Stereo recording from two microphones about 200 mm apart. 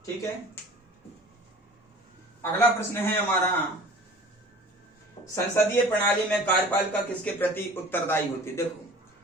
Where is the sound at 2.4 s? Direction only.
10° left (ahead or behind).